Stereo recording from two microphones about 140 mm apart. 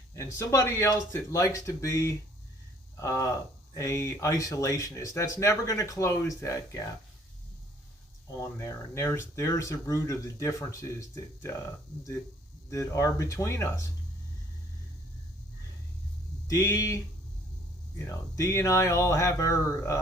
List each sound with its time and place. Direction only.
0.2 s speech: 20° left (ahead or behind)
8.3 s speech: 20° left (ahead or behind)
12.7 s speech: 20° left (ahead or behind)
16.5 s speech: 20° left (ahead or behind)